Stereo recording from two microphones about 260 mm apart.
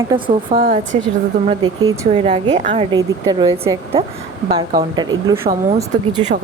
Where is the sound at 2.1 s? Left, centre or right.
Right.